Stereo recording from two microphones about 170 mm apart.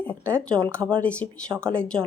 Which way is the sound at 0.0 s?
10° left (ahead or behind).